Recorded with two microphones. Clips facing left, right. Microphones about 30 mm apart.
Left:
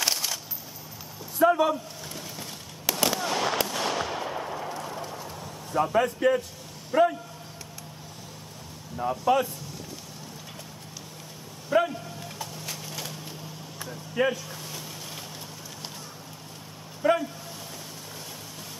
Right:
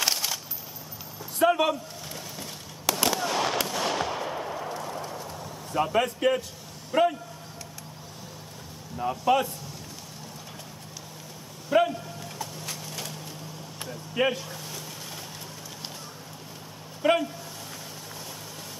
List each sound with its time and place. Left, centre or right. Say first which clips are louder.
0.0 s a sound: right 1 dB; centre
1.4 s speech: left 1 dB; right
2.9 s fireworks: right 1 dB; centre
5.8 s speech: left 1 dB; centre
8.9 s speech: even; centre
11.7 s a sound: right 1 dB; centre
12.2 s wood: right 1 dB; centre
14.1 s speech: even; centre
17.0 s speech: even; centre